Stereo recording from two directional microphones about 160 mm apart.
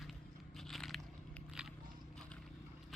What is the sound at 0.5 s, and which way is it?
Biting, centre (ahead or behind).